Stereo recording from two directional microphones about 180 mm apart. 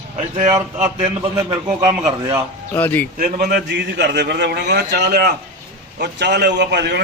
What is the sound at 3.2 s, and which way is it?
A man's voice, 50° right (ahead or behind).